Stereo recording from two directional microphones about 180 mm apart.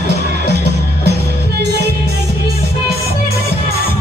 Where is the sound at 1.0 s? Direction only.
65° right (ahead or behind).